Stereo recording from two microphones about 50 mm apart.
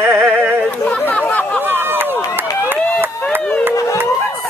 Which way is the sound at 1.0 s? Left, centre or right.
Left.